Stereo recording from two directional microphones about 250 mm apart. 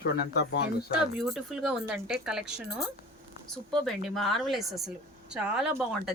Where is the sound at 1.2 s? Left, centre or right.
Centre.